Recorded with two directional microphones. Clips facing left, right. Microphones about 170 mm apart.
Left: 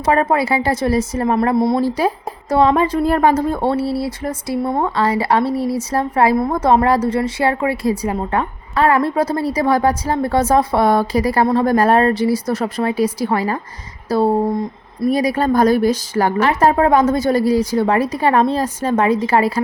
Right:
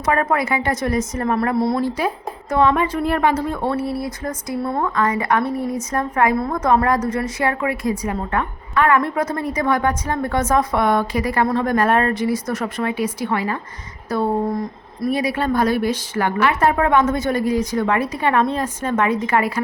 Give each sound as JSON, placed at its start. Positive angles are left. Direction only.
{"t": 0.0, "sound": "a woman's voice", "side_deg": 30}
{"t": 1.8, "sound": "a woman's voice", "side_deg": 35}